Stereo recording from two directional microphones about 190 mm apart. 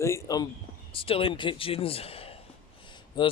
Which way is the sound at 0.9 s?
30° left (ahead or behind).